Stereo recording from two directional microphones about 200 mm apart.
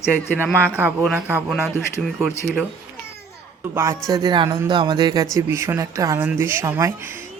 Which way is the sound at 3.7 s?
15° right (ahead or behind).